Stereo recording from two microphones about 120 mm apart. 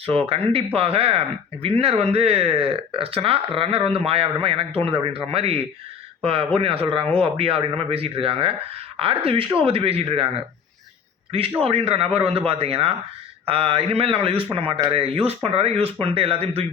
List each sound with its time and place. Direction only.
0.0 s speech: 50° right (ahead or behind)
11.3 s speech: 55° right (ahead or behind)